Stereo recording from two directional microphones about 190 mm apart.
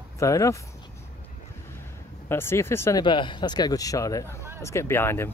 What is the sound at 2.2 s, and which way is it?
Speech, 15° left (ahead or behind).